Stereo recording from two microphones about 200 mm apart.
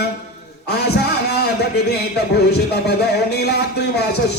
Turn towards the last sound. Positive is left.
turn(degrees=55)  # may be behind; listen again after turning